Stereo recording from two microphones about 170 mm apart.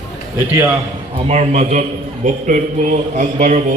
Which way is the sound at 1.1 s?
40° right (ahead or behind).